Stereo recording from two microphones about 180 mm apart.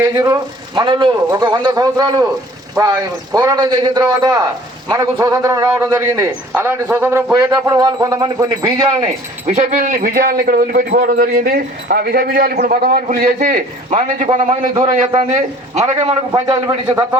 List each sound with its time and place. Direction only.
0.0 s a man's voice: 20° right (ahead or behind)
9.5 s a man's voice: 40° right (ahead or behind)
15.4 s a man's voice: 40° right (ahead or behind)
16.3 s a man's voice: 20° right (ahead or behind)